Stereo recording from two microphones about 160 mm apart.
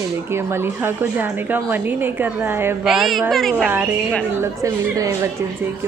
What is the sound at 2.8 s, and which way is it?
A woman's voice, centre (ahead or behind).